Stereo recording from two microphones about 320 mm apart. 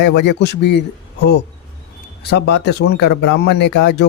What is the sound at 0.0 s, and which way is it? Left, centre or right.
Speech, left.